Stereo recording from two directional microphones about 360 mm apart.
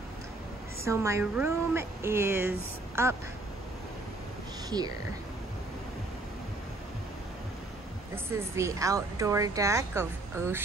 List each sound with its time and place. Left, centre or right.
0.8 s speech: centre
4.6 s speech: centre
8.3 s speech: centre